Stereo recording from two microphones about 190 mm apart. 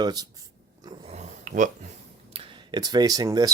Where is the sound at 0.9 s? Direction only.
35° right (ahead or behind).